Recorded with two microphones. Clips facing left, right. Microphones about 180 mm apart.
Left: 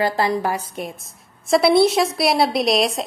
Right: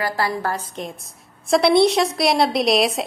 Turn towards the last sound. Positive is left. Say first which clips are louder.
# right 1 dB
turn(degrees=0)  # may be behind; listen again after turning